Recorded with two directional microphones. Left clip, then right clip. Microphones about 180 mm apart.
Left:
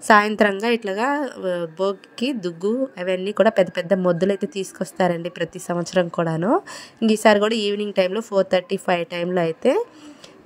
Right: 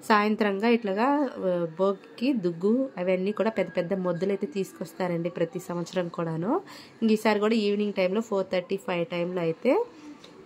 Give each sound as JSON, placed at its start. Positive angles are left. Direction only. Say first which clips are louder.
{"t": 0.0, "sound": "a woman's voice", "louder": "left 8 dB", "side_deg": 40}